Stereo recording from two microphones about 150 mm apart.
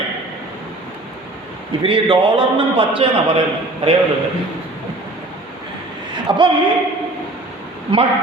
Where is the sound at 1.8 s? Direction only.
35° right (ahead or behind).